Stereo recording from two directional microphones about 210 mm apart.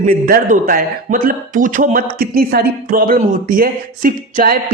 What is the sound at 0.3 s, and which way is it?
A man's voice, 40° right (ahead or behind).